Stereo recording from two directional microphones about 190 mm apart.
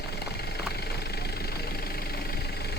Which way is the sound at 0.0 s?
60° left (ahead or behind).